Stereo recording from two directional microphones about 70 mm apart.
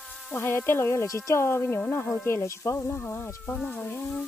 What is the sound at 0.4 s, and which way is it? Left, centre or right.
Speech, left.